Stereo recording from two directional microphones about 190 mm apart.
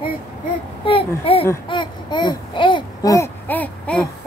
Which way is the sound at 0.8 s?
30° left (ahead or behind).